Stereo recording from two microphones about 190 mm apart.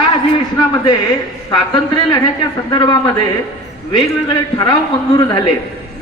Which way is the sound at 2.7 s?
25° left (ahead or behind).